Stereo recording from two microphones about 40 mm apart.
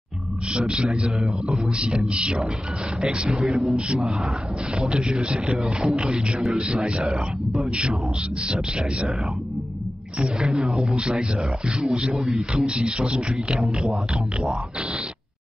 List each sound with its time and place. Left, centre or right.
0.5 s speech: right
2.1 s speech: right
3.6 s speech: centre
5.9 s speech: centre
6.5 s speech: right
6.8 s speech: centre
10.4 s speech: centre
13.6 s speech: centre